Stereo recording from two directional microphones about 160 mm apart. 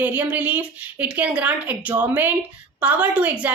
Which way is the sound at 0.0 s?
10° right (ahead or behind).